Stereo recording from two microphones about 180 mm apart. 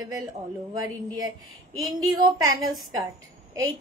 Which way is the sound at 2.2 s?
20° right (ahead or behind).